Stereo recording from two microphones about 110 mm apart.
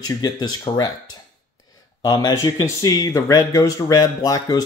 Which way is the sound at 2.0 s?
40° left (ahead or behind).